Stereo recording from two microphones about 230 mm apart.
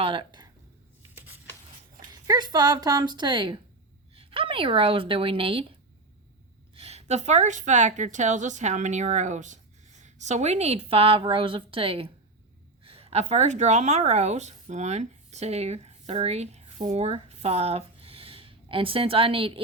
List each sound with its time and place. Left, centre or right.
0.0 s speech: right
1.1 s a sound: centre
2.2 s a woman's voice: centre
6.7 s a woman's voice: right